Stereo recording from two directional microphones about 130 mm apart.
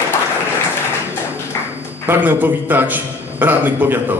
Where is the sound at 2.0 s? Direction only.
15° right (ahead or behind).